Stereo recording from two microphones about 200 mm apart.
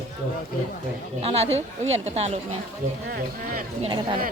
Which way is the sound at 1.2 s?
30° right (ahead or behind).